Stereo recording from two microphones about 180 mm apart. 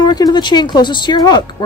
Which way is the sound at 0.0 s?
25° left (ahead or behind).